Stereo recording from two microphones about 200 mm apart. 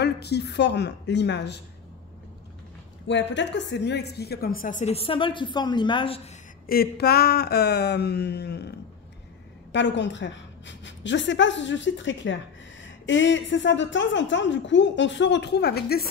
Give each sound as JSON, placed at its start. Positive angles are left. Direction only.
{"t": 0.0, "sound": "a woman's voice", "side_deg": 55}
{"t": 3.1, "sound": "a woman's voice", "side_deg": 65}
{"t": 6.7, "sound": "a woman's voice", "side_deg": 50}